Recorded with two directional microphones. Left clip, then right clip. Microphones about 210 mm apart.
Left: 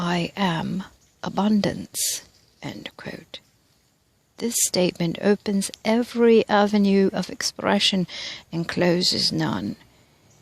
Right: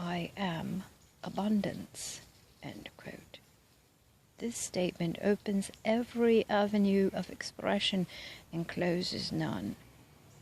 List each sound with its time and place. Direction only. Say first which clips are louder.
0.0 s speech: left 12 dB; 45° left (ahead or behind)